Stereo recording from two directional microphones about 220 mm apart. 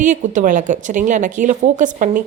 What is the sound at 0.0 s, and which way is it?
Speech, 35° right (ahead or behind).